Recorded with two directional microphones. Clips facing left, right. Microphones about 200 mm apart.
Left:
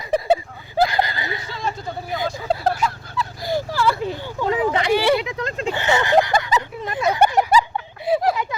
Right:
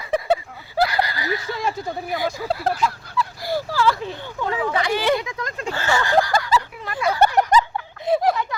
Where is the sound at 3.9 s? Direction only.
10° left (ahead or behind).